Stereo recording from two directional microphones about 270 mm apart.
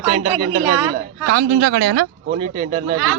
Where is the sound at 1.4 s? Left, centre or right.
Right.